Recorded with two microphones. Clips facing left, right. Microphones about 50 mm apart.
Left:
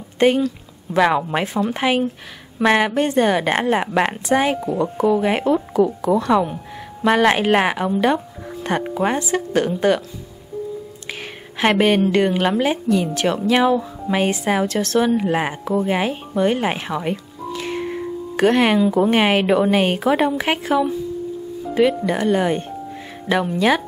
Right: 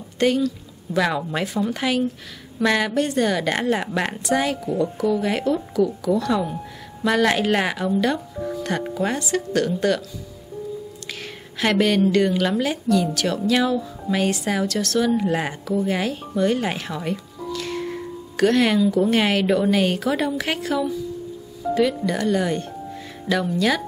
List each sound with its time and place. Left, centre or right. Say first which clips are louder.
0.2 s a woman's voice: left 4 dB; left
11.1 s a sound: left 3 dB; left
12.1 s a woman's voice: left 2 dB; left